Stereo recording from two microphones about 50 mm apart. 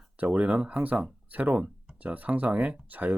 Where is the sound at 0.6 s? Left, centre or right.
Right.